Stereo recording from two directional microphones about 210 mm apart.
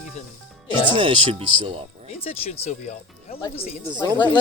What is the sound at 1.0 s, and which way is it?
Speech, 25° right (ahead or behind).